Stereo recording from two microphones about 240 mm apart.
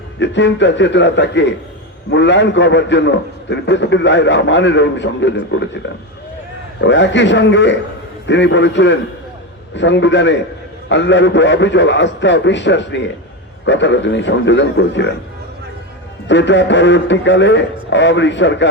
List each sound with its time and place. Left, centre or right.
0.2 s a man's voice: left
6.8 s a man's voice: left
16.3 s a man's voice: left